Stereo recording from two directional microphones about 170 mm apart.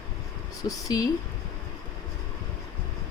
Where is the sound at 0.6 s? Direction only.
20° left (ahead or behind).